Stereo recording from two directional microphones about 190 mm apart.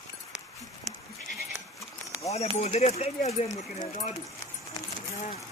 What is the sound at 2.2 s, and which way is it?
Speech, 35° left (ahead or behind).